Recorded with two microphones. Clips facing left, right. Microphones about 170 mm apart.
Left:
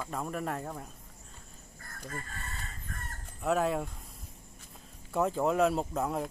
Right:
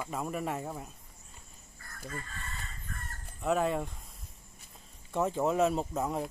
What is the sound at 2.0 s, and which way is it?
Crowing, 45° left (ahead or behind).